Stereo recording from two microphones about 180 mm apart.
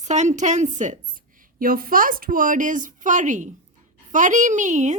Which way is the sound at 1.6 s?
55° right (ahead or behind).